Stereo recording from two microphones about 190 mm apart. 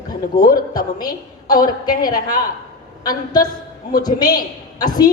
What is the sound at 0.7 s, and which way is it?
A woman's voice, 20° left (ahead or behind).